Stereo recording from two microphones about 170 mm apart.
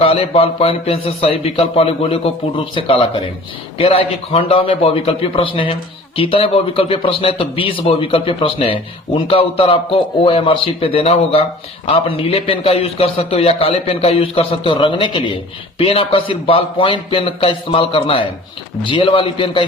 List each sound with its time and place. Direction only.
0.0 s a man's voice: 35° left (ahead or behind)